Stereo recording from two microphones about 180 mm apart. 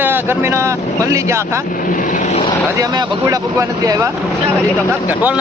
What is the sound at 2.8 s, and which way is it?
A man's voice, 25° right (ahead or behind).